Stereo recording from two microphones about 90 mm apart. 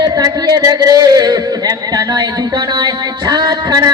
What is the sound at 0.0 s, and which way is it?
Speech, 45° right (ahead or behind).